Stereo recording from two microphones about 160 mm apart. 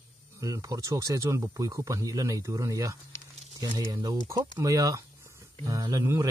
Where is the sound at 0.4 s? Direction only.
20° right (ahead or behind).